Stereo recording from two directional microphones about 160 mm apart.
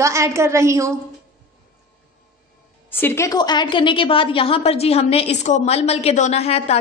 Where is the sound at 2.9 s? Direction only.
15° left (ahead or behind).